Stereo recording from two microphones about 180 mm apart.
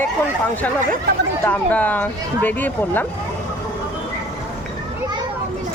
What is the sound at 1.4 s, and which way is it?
Speech, 10° left (ahead or behind).